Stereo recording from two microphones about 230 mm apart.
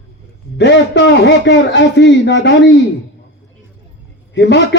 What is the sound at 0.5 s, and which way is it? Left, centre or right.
A man's voice, left.